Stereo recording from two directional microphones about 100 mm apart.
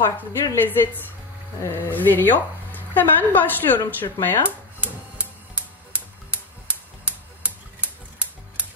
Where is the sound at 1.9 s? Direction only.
20° left (ahead or behind).